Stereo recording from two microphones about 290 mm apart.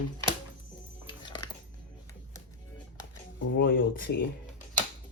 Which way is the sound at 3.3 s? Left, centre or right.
Left.